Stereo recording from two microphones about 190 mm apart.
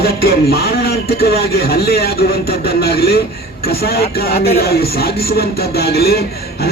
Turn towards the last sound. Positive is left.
turn(degrees=55)  # may be behind; listen again after turning